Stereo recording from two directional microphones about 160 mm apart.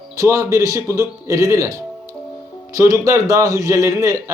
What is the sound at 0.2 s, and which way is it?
Speech, 20° right (ahead or behind).